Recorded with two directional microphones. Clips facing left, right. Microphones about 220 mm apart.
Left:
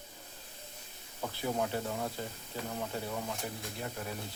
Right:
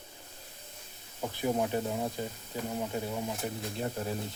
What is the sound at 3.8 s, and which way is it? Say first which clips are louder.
Speech: right 7 dB; 30° right (ahead or behind).